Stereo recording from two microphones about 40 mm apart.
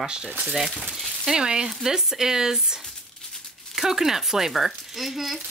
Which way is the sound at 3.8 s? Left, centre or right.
Centre.